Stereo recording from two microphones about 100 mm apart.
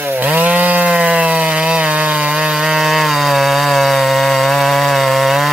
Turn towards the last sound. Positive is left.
turn(degrees=0)  # may be behind; listen again after turning